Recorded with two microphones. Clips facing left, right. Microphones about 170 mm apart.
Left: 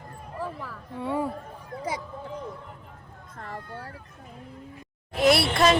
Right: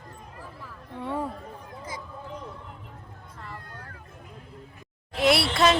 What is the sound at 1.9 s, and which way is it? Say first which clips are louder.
Speech: left 8 dB; 75° left (ahead or behind).